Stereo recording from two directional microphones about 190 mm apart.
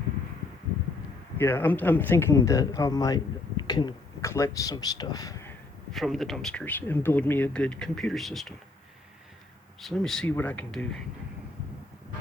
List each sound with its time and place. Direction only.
1.4 s speech: 10° left (ahead or behind)
5.9 s speech: centre (ahead or behind)
9.8 s speech: centre (ahead or behind)